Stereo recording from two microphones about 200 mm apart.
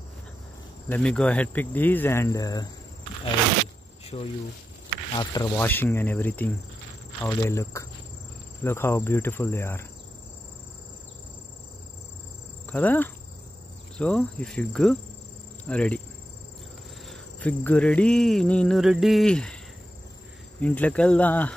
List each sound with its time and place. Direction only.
0.8 s speech: 5° left (ahead or behind)
4.1 s speech: 25° left (ahead or behind)
12.6 s speech: 10° left (ahead or behind)
13.9 s cricket: 5° left (ahead or behind)
17.1 s cricket: 5° left (ahead or behind)
20.6 s speech: 5° left (ahead or behind)